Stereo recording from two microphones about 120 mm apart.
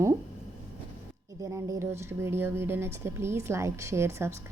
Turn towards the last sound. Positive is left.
turn(degrees=-20)  # may be behind; listen again after turning